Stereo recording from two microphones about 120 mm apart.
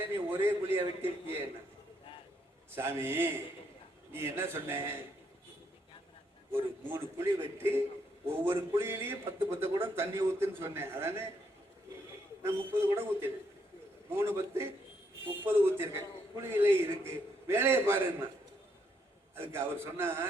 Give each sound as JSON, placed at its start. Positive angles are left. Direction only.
{"t": 0.0, "sound": "a man's voice", "side_deg": -20}
{"t": 2.7, "sound": "a man's voice", "side_deg": -20}
{"t": 6.5, "sound": "a man's voice", "side_deg": -20}
{"t": 12.4, "sound": "a man's voice", "side_deg": -20}
{"t": 19.4, "sound": "a man's voice", "side_deg": -20}